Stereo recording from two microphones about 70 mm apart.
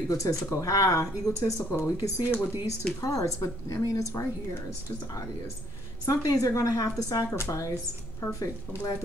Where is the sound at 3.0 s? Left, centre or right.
Left.